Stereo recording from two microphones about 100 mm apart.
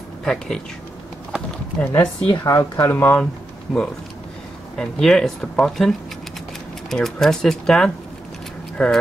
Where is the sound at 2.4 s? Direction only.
30° left (ahead or behind).